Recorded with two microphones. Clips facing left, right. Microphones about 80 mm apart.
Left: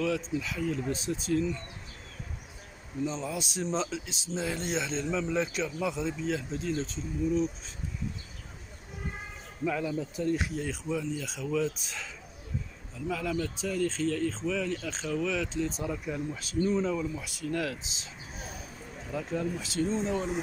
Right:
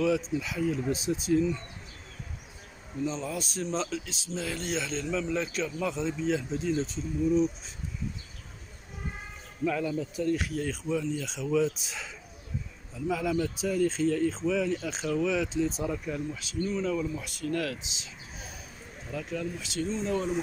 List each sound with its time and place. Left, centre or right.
0.0 s speech: centre
3.1 s speech: centre
9.7 s speech: centre
10.1 s speech: left; by 12.1 s centre
13.1 s speech: centre
16.6 s speech: left
16.9 s speech: centre
19.1 s speech: left
20.1 s speech: centre